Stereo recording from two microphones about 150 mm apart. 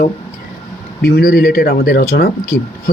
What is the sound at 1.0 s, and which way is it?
Speech, 90° left.